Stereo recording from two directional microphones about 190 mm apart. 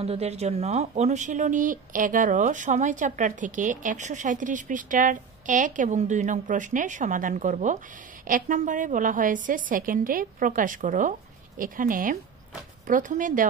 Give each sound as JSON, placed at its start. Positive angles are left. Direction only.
{"t": 0.0, "sound": "a woman's voice", "side_deg": -35}